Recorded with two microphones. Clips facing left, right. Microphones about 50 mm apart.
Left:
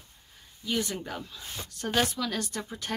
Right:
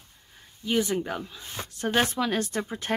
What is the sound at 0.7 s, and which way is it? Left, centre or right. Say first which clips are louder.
Speech: right 5 dB; right.